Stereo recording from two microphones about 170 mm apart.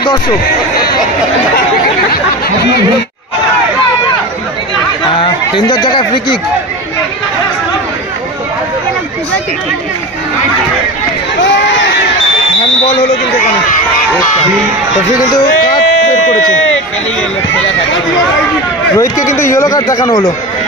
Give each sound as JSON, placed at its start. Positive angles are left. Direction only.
{"t": 5.2, "sound": "speech", "side_deg": 25}
{"t": 18.9, "sound": "speech", "side_deg": 15}